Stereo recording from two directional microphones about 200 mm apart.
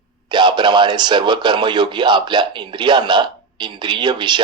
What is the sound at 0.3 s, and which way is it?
Speech, 20° right (ahead or behind).